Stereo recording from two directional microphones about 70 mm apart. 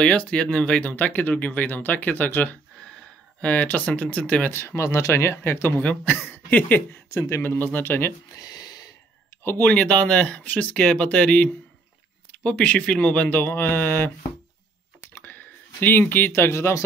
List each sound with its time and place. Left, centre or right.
0.0 s speech: centre
4.5 s speech: left
7.1 s speech: left
7.5 s speech: left
8.4 s a sound: left
9.4 s speech: left
9.7 s speech: centre
15.1 s a sound: left